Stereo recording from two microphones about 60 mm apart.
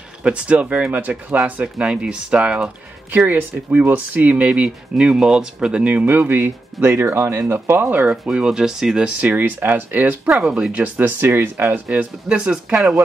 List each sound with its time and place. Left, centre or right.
0.2 s speech: centre
3.3 s speech: right
4.9 s speech: centre
6.0 s speech: right
8.3 s speech: centre
9.0 s speech: right
12.4 s speech: centre